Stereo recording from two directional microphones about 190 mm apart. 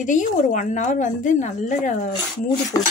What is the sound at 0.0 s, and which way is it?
A woman's voice, 40° left (ahead or behind).